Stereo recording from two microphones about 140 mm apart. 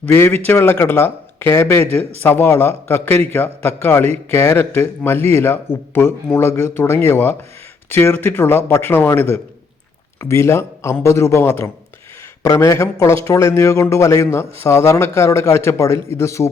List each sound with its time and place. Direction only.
0.0 s a man's voice: 15° left (ahead or behind)